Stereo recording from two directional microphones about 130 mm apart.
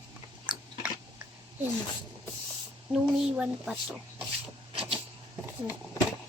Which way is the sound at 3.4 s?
10° right (ahead or behind).